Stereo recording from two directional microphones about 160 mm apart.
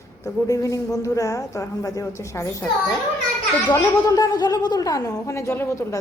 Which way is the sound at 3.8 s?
25° left (ahead or behind).